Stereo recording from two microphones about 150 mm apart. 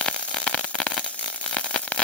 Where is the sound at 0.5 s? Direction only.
10° left (ahead or behind).